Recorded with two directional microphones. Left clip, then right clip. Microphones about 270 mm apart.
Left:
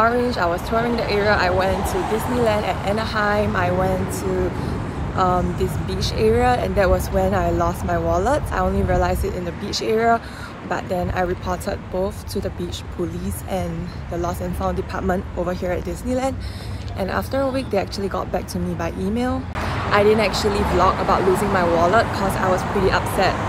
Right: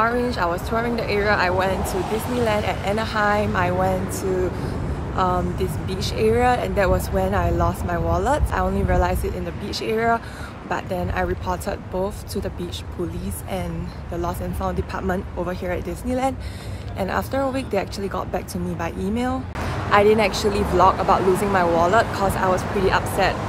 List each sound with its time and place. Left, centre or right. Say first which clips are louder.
0.0 s speech: left 2 dB; centre
2.0 s speech: left 3 dB; left
2.4 s speech: left 1 dB; centre
14.2 s speech: left 2 dB; centre